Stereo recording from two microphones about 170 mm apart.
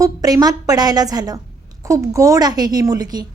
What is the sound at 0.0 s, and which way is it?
A woman's voice, 20° right (ahead or behind).